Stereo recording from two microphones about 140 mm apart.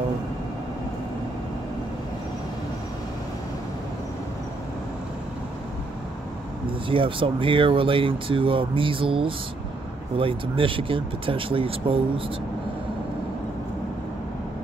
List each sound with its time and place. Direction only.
6.9 s speech: 40° right (ahead or behind)